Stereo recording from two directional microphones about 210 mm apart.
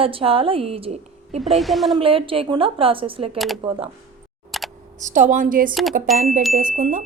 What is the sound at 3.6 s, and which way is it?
Speech, 25° right (ahead or behind).